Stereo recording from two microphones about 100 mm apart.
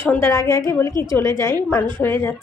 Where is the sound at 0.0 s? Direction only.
25° left (ahead or behind).